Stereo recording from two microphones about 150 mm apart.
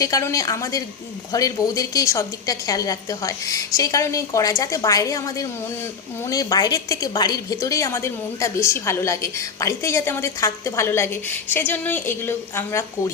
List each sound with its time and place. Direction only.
0.0 s a woman's voice: 20° left (ahead or behind)